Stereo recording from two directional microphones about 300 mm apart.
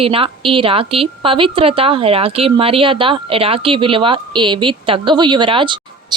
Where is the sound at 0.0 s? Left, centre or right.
Centre.